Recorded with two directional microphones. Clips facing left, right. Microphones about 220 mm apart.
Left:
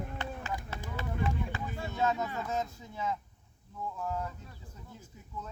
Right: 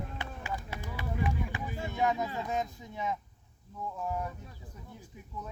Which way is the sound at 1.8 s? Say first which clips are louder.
Right 1 dB; 20° right (ahead or behind).